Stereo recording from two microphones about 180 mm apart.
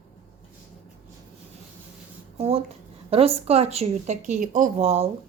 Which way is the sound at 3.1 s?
35° right (ahead or behind).